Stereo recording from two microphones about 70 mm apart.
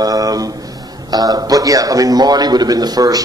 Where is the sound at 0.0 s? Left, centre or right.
Right.